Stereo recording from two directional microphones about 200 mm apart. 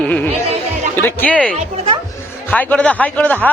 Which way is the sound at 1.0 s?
5° left (ahead or behind).